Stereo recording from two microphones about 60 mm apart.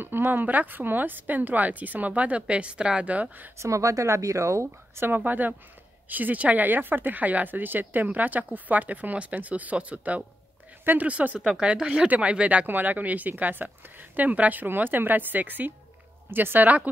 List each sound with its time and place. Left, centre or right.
0.0 s speech: right
3.5 s speech: right
5.0 s speech: right